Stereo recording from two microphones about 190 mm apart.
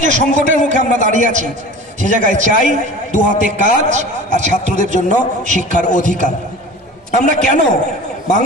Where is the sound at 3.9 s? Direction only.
40° right (ahead or behind).